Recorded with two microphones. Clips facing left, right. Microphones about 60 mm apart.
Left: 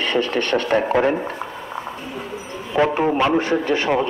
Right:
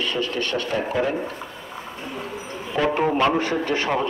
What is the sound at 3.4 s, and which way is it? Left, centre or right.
Speech, left.